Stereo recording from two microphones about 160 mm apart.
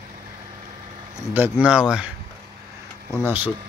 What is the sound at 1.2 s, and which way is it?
Speech, 15° right (ahead or behind).